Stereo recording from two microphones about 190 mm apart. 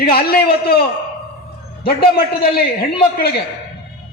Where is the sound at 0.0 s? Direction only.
50° left (ahead or behind).